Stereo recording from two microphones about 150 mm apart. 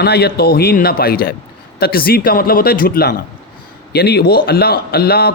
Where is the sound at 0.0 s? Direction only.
90° left.